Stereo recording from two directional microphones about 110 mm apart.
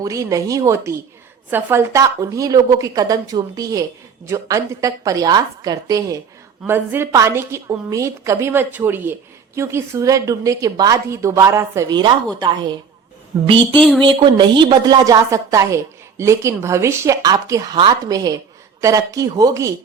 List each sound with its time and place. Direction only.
0.0 s a woman's voice: 30° right (ahead or behind)
6.7 s a woman's voice: 20° right (ahead or behind)
13.7 s speech: 5° left (ahead or behind)
14.0 s a woman's voice: 50° right (ahead or behind); by 19.7 s 30° right (ahead or behind)